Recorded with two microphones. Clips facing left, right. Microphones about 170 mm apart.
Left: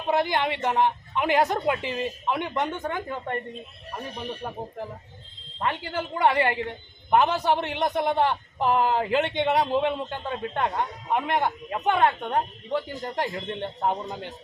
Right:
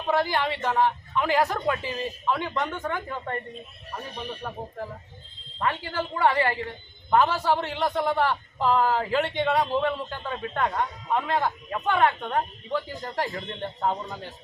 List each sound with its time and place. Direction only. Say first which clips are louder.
0.1 s a man's voice: left 1 dB; 20° left (ahead or behind)
4.4 s a man's voice: left 1 dB; 20° left (ahead or behind)